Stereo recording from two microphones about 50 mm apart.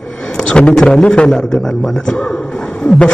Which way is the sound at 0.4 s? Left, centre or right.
Left.